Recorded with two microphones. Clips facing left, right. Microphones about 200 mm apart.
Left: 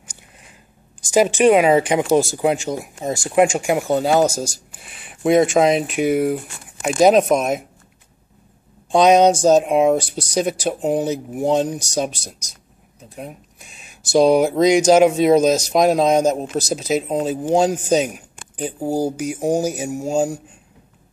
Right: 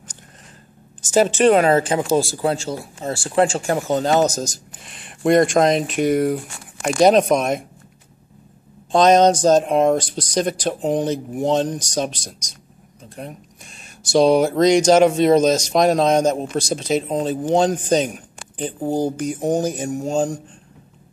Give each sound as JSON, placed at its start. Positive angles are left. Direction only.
{"t": 1.0, "sound": "speech", "side_deg": 10}
{"t": 8.9, "sound": "speech", "side_deg": 10}